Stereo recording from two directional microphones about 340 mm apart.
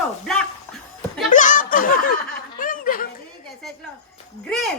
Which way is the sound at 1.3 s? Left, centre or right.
Left.